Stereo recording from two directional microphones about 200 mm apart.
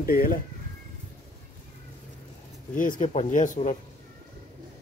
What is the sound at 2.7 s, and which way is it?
Speech, 40° left (ahead or behind).